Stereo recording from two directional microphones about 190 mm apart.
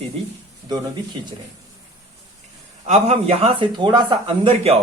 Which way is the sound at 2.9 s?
35° right (ahead or behind).